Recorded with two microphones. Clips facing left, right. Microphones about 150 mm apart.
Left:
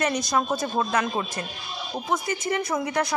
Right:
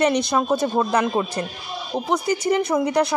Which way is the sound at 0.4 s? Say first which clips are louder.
Right 5 dB; 20° right (ahead or behind).